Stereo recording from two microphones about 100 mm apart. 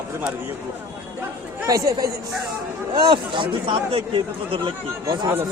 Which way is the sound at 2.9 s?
50° right (ahead or behind).